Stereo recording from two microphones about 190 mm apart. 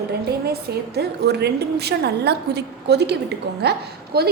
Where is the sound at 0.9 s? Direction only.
60° right (ahead or behind).